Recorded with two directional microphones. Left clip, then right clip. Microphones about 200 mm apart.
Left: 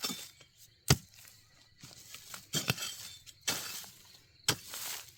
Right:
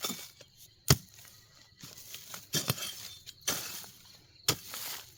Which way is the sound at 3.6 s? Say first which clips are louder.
Even; 20° left (ahead or behind).